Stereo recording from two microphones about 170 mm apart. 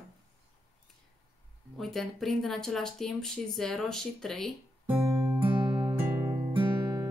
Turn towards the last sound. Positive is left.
turn(degrees=-20)  # may be behind; listen again after turning